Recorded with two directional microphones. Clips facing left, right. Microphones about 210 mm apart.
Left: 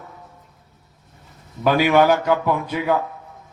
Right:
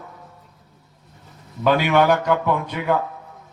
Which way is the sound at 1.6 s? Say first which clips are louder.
Left 1 dB; 5° left (ahead or behind).